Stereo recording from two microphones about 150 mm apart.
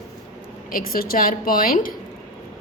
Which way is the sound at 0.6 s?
70° left (ahead or behind).